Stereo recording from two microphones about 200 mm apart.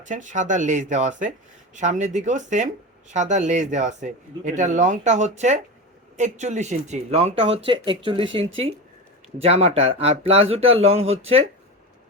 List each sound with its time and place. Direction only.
0.0 s speech: 40° right (ahead or behind)